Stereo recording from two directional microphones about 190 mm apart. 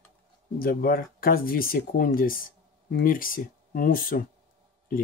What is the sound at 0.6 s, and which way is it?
Speech, 50° left (ahead or behind).